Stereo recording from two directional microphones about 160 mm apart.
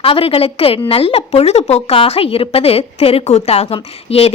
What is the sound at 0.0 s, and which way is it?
A woman's voice, 35° left (ahead or behind).